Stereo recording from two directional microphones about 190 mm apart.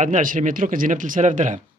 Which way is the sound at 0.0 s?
45° right (ahead or behind).